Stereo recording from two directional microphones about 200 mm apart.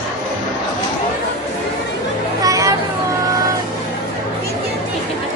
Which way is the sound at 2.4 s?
15° right (ahead or behind).